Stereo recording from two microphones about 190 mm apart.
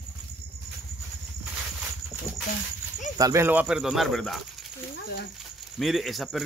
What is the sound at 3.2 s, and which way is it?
Speech, 15° right (ahead or behind).